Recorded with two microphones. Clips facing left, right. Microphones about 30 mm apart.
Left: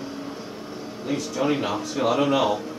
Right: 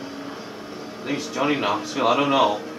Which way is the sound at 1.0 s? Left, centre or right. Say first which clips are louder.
Right 1 dB; right.